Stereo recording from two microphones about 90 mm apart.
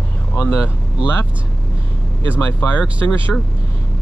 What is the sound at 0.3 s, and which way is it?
Speech, 25° left (ahead or behind).